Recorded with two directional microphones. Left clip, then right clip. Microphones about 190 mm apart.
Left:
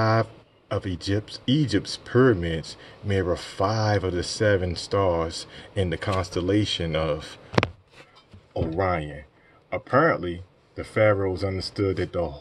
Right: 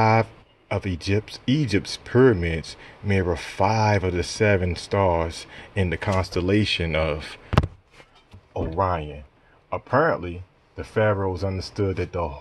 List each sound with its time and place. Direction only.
0.0 s speech: 40° right (ahead or behind)
9.7 s speech: 30° right (ahead or behind)